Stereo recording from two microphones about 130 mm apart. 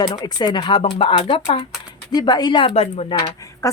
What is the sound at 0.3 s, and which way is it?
A woman's voice, 35° left (ahead or behind).